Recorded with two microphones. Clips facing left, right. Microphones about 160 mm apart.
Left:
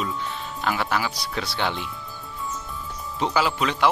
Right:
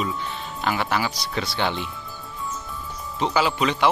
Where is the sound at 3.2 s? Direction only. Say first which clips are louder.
Right 1 dB; centre (ahead or behind).